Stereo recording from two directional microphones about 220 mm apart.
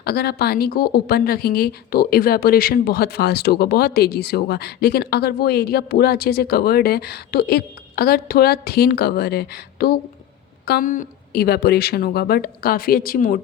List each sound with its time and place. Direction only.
0.0 s a woman's voice: 45° left (ahead or behind)